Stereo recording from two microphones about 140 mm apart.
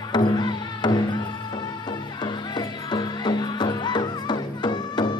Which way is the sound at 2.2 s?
30° left (ahead or behind).